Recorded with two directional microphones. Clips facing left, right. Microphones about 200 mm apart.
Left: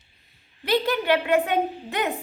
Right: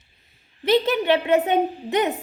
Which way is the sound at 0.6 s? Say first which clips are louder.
Right 4 dB; 20° right (ahead or behind).